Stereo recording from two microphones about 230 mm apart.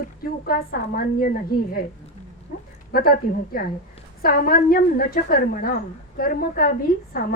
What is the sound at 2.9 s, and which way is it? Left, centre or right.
A woman's voice, left.